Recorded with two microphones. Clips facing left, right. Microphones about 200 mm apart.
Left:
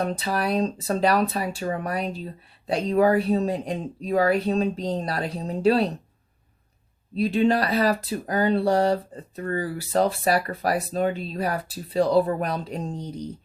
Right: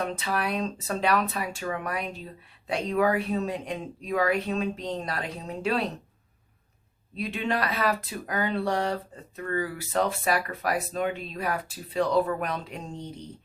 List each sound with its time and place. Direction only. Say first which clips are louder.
0.0 s speech: left 4 dB; 35° left (ahead or behind)
7.2 s speech: left 8 dB; 35° left (ahead or behind)